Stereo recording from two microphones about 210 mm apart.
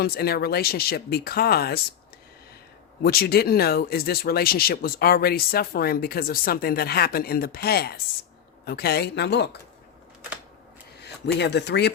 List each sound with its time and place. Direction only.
0.0 s speech: 45° left (ahead or behind)
3.0 s speech: 45° left (ahead or behind)
11.0 s speech: 55° left (ahead or behind)